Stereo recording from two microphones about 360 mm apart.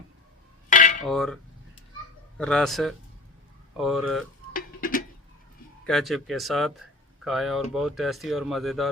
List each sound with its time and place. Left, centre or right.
0.7 s cutlery: left
1.0 s speech: centre
2.4 s speech: centre
4.5 s a sound: left
5.8 s speech: centre